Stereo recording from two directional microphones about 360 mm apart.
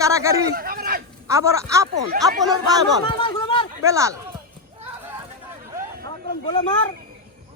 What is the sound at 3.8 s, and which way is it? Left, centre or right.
Speech, centre.